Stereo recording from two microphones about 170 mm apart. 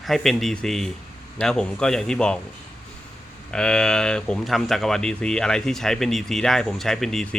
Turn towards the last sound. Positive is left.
turn(degrees=5)  # may be behind; listen again after turning